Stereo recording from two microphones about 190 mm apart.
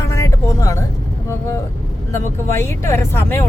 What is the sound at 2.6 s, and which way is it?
Speech, 15° left (ahead or behind).